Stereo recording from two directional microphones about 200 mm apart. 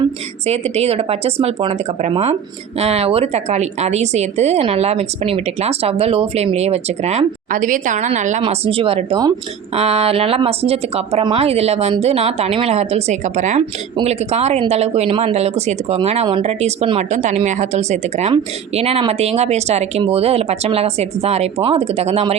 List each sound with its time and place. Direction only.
0.4 s speech: 30° right (ahead or behind)
8.4 s speech: 25° right (ahead or behind)